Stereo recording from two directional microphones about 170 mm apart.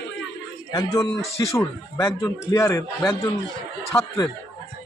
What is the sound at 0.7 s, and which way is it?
A man's voice, 25° left (ahead or behind).